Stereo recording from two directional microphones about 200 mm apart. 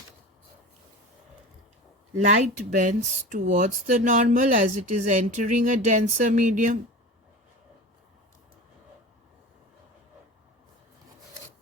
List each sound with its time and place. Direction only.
2.1 s speech: 40° right (ahead or behind)